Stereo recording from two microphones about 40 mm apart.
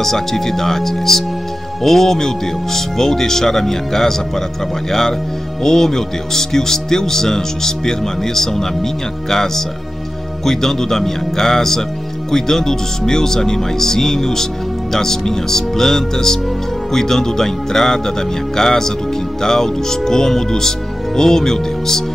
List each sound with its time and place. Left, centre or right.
0.0 s speech: centre
5.6 s speech: centre